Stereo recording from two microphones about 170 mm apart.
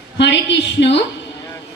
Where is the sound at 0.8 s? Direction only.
90° left.